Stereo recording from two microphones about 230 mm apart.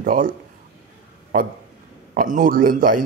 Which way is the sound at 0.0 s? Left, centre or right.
Right.